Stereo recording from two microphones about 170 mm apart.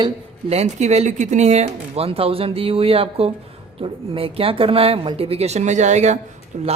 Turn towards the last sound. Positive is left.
turn(degrees=-40)  # may be behind; listen again after turning